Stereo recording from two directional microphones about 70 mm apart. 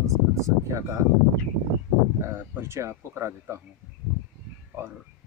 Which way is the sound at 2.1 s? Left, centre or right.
Right.